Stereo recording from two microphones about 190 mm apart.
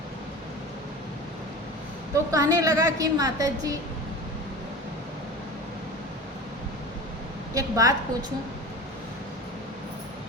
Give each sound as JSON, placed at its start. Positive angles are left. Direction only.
{"t": 2.1, "sound": "a woman's voice", "side_deg": -20}
{"t": 7.5, "sound": "a woman's voice", "side_deg": -20}